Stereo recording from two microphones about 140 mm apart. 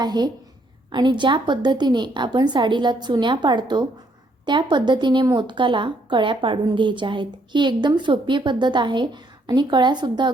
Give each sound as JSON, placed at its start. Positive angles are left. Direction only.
{"t": 0.0, "sound": "a woman's voice", "side_deg": -30}